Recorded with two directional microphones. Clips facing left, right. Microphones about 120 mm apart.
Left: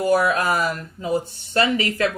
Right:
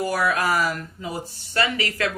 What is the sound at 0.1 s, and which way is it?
Speech, 25° left (ahead or behind).